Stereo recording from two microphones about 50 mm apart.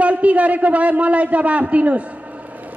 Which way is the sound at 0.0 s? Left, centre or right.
Right.